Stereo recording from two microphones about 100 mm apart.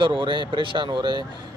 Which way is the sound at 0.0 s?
55° right (ahead or behind).